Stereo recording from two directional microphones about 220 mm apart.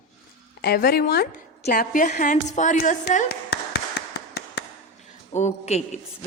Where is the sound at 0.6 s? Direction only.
45° left (ahead or behind).